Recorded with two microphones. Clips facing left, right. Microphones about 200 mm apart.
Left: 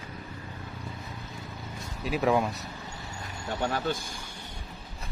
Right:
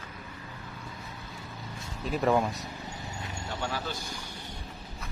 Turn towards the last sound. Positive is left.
turn(degrees=50)  # may be behind; listen again after turning